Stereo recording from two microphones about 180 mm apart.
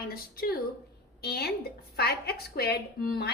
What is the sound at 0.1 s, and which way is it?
A woman's voice, 55° left (ahead or behind).